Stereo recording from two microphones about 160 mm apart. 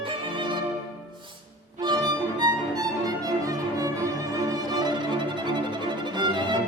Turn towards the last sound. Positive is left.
turn(degrees=-30)  # may be behind; listen again after turning